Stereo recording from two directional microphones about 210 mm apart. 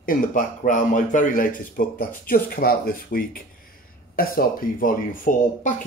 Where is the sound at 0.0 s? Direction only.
40° left (ahead or behind).